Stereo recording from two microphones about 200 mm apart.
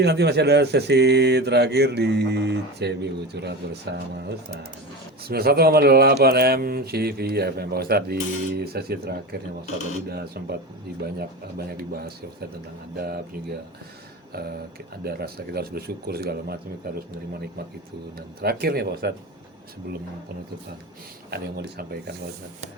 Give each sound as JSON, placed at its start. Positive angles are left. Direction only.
{"t": 0.0, "sound": "speech", "side_deg": -55}
{"t": 14.3, "sound": "speech", "side_deg": -50}
{"t": 18.4, "sound": "speech", "side_deg": -50}
{"t": 21.2, "sound": "speech", "side_deg": -55}